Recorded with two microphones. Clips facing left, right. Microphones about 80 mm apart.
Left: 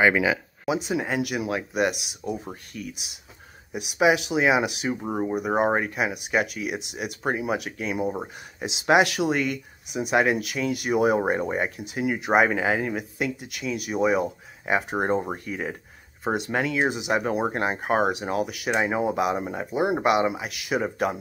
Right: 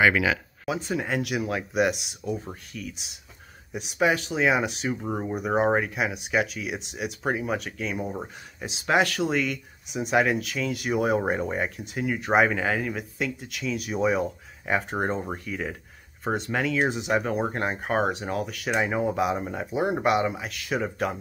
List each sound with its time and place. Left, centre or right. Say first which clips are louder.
0.0 s speech: left 1 dB; centre